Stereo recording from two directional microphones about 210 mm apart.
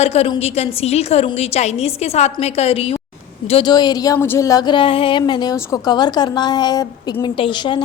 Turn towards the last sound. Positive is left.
turn(degrees=20)  # may be behind; listen again after turning